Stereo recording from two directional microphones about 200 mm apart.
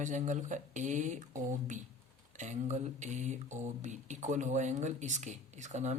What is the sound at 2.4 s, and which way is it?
Speech, 35° right (ahead or behind).